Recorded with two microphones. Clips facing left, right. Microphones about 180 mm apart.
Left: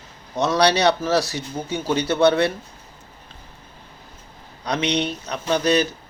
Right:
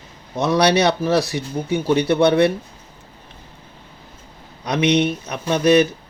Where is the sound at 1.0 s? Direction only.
15° right (ahead or behind).